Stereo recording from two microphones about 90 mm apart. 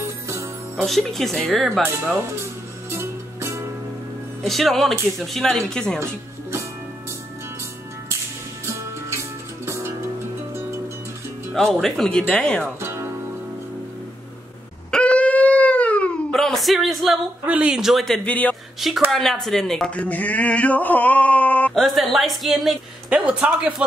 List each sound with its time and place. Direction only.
0.0 s music: 35° right (ahead or behind)
0.8 s speech: centre (ahead or behind)
2.9 s music: 30° right (ahead or behind)
4.4 s speech: centre (ahead or behind)
11.5 s speech: 5° left (ahead or behind)
12.8 s music: 30° right (ahead or behind)
14.9 s dog: 10° left (ahead or behind)
16.3 s a sound: centre (ahead or behind)
17.5 s speech: 10° right (ahead or behind); by 18.6 s 15° left (ahead or behind)
18.8 s speech: centre (ahead or behind); by 21.7 s 15° left (ahead or behind)
21.7 s speech: centre (ahead or behind)
23.0 s speech: 15° right (ahead or behind)